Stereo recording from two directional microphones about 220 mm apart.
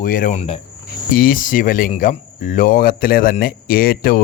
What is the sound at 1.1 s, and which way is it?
Speech, 40° left (ahead or behind).